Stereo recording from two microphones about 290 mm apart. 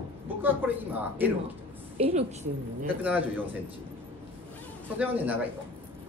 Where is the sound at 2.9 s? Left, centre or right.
Centre.